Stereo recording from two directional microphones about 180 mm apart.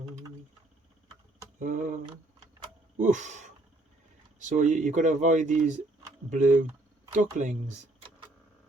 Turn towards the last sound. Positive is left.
turn(degrees=-45)  # may be behind; listen again after turning